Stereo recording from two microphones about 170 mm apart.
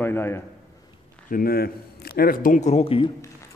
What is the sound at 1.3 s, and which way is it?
A man's voice, 60° left (ahead or behind).